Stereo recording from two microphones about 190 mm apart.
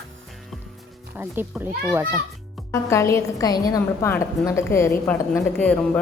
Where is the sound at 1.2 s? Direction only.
10° right (ahead or behind).